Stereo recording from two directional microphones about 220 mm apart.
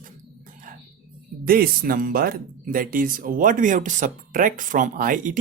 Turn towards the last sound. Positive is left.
turn(degrees=-35)  # may be behind; listen again after turning